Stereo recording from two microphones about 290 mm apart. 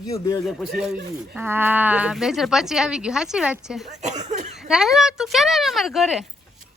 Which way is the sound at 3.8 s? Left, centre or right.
Right.